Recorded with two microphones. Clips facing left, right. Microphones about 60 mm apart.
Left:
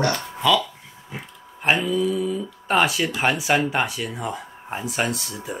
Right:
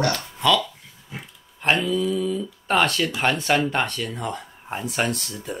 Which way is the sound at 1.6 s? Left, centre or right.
Centre.